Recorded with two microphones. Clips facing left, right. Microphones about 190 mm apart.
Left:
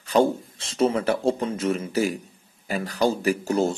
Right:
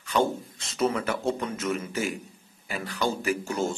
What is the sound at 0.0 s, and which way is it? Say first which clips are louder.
A man's voice: left 5 dB; 35° left (ahead or behind).